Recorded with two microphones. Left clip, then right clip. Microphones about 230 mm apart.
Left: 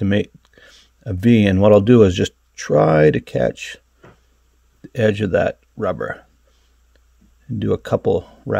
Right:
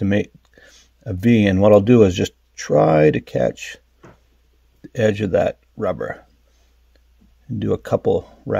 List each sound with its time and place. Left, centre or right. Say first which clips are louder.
0.0 s speech: left 1 dB; centre
4.8 s speech: left 1 dB; centre
7.4 s speech: left 1 dB; centre